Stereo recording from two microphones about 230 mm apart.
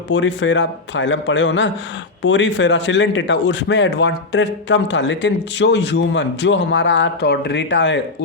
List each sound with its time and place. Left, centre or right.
0.1 s a man's voice: left